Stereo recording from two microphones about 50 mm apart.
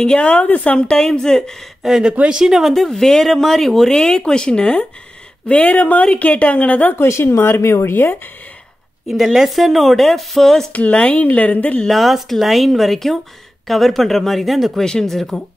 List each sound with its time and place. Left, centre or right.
0.0 s speech: centre
1.8 s speech: centre
2.2 s speech: centre
2.7 s speech: centre
3.9 s speech: centre; by 7.0 s left
7.0 s speech: left
7.9 s speech: left
9.0 s speech: centre
10.7 s speech: left
11.9 s speech: centre
14.8 s speech: centre